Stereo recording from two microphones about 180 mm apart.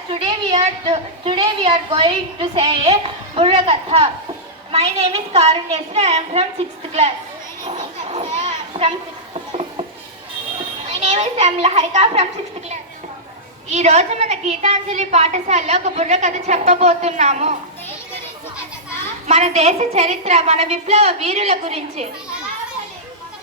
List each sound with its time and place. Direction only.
0.1 s a woman's voice: 25° right (ahead or behind)
7.6 s a sound: 35° right (ahead or behind)
8.7 s a woman's voice: 30° right (ahead or behind)
9.3 s a sound: 30° right (ahead or behind)
11.0 s a woman's voice: 35° right (ahead or behind)
19.3 s a woman's voice: 40° right (ahead or behind)